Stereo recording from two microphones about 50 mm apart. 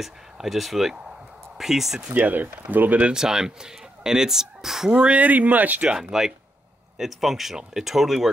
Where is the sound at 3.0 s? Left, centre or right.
Centre.